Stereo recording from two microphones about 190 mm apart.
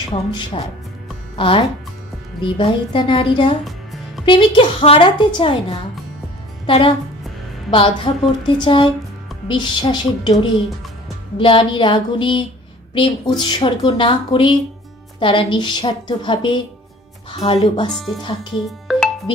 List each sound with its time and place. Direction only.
0.1 s a woman's voice: 25° left (ahead or behind)
11.3 s a woman's voice: 25° left (ahead or behind)
17.9 s speech: centre (ahead or behind)
18.6 s music: centre (ahead or behind)